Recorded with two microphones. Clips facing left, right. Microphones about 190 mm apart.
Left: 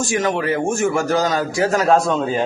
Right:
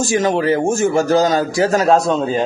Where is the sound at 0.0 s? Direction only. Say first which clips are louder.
Right 4 dB; 30° right (ahead or behind).